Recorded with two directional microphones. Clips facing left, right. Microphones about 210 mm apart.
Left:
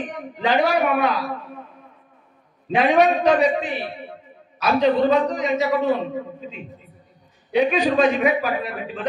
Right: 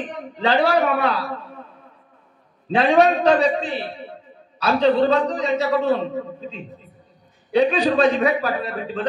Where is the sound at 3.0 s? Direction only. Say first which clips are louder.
Right 1 dB; 30° right (ahead or behind).